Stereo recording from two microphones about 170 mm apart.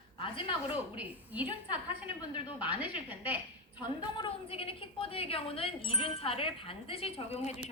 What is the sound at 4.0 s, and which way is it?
A woman's voice, 30° left (ahead or behind).